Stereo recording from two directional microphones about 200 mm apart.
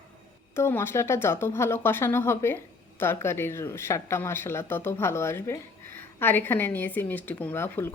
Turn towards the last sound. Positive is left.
turn(degrees=10)  # may be behind; listen again after turning